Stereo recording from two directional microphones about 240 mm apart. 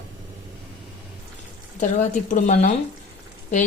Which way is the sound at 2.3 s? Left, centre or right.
Left.